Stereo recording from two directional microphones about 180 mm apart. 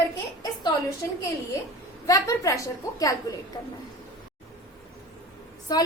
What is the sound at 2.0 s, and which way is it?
A woman's voice, 20° left (ahead or behind).